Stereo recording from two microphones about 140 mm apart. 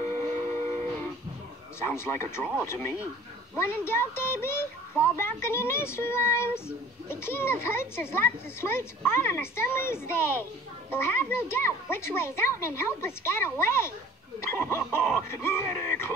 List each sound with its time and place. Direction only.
0.1 s train: 15° left (ahead or behind)
1.8 s speech: 15° left (ahead or behind)